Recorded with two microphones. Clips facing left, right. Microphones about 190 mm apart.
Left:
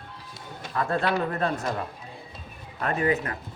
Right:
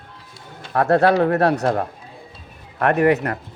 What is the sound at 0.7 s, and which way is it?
Speech, 70° right (ahead or behind).